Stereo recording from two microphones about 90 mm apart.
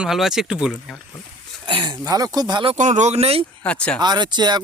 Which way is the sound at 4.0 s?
55° right (ahead or behind).